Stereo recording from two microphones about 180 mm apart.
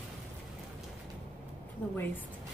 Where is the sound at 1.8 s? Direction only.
10° left (ahead or behind).